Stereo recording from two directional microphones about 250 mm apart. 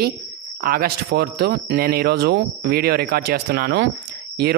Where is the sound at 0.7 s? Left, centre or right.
Right.